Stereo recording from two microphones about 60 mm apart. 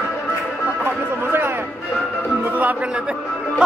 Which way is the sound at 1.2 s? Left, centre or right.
Right.